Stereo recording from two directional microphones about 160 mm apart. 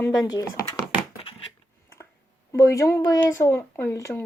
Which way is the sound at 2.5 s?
20° left (ahead or behind).